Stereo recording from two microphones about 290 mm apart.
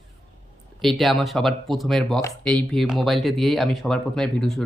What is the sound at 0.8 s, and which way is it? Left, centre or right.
Speech, centre.